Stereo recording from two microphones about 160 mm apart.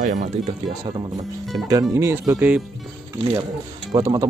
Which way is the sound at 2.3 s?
5° right (ahead or behind).